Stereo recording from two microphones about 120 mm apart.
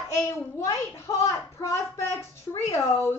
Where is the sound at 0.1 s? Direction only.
20° left (ahead or behind).